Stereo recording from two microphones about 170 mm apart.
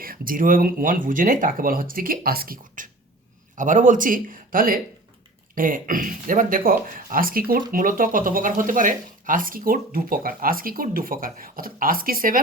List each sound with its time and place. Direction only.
0.0 s speech: 55° right (ahead or behind)